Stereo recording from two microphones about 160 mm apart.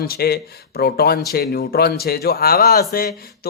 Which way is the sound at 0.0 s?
75° left (ahead or behind).